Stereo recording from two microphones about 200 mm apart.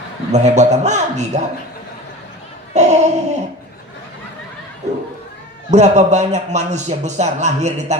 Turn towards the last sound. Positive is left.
turn(degrees=-35)  # may be behind; listen again after turning